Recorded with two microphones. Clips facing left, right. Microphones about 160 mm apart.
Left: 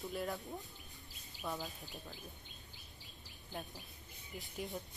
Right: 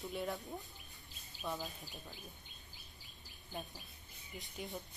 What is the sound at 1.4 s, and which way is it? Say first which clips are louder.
Speech: even; 15° left (ahead or behind).